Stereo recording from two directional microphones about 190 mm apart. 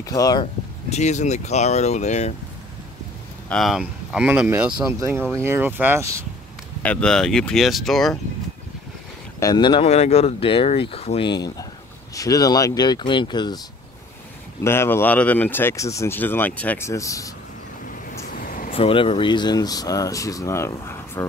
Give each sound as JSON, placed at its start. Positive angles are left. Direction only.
{"t": 0.0, "sound": "speech", "side_deg": 20}
{"t": 0.8, "sound": "speech", "side_deg": 35}
{"t": 3.4, "sound": "speech", "side_deg": 0}
{"t": 6.8, "sound": "speech", "side_deg": 5}
{"t": 9.4, "sound": "speech", "side_deg": 20}
{"t": 14.6, "sound": "speech", "side_deg": 15}
{"t": 18.7, "sound": "speech", "side_deg": 30}